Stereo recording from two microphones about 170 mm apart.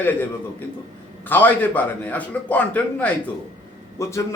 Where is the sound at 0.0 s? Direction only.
10° left (ahead or behind).